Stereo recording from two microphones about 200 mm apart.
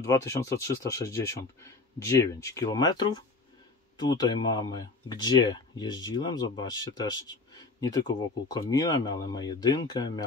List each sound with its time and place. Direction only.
0.0 s speech: 15° left (ahead or behind)